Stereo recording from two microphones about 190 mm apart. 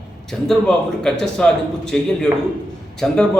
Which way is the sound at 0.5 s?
5° left (ahead or behind).